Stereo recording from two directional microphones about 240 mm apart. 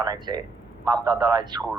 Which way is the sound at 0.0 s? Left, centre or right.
Centre.